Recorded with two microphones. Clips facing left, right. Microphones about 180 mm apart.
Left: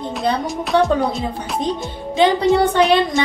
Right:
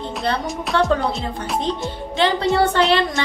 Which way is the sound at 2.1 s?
15° left (ahead or behind).